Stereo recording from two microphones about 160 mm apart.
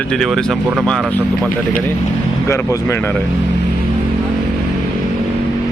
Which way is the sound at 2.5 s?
20° left (ahead or behind).